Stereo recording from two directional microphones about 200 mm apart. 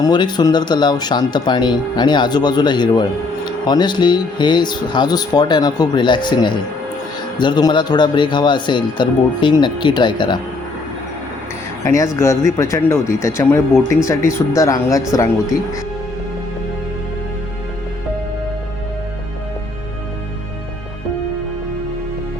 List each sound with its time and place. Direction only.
0.0 s speech: 20° left (ahead or behind)
12.2 s speech: 15° left (ahead or behind)